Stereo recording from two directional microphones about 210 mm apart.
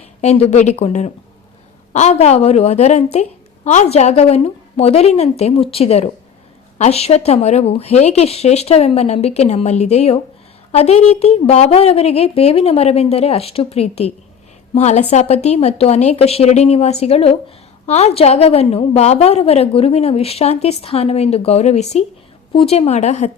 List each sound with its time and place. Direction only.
0.2 s a woman's voice: 30° left (ahead or behind)